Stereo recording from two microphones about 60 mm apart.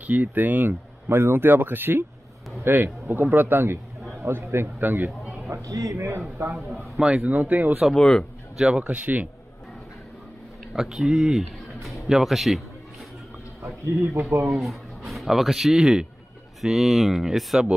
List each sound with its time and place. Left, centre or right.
0.0 s a man's voice: right
4.8 s speech: right
5.5 s speech: right
7.0 s speech: centre
7.2 s speech: right
7.9 s a man's voice: centre
8.7 s speech: right
10.7 s speech: centre
13.6 s speech: right
14.5 s speech: centre